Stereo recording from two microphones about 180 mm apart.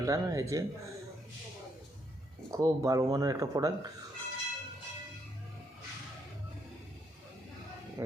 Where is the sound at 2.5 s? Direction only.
15° right (ahead or behind).